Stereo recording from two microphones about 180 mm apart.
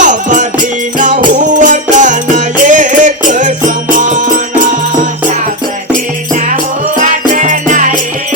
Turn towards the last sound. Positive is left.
turn(degrees=-45)  # may be behind; listen again after turning